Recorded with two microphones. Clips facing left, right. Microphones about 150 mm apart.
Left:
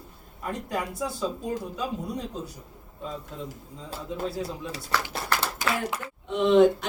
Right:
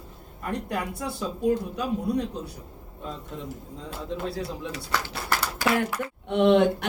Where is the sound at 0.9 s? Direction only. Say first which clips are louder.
Left 2 dB; 65° right (ahead or behind).